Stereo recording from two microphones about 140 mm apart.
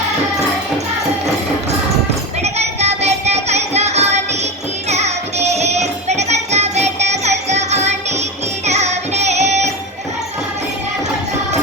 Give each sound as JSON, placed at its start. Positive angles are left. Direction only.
{"t": 2.4, "sound": "music", "side_deg": -50}